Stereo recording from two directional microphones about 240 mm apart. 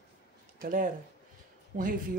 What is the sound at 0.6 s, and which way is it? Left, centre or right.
Speech, right.